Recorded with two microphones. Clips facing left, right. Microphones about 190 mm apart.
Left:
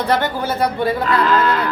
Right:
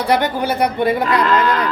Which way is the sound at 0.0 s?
15° right (ahead or behind).